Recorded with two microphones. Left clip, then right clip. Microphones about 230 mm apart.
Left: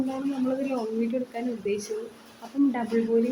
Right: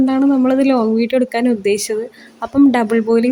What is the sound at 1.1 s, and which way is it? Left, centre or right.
Speech, right.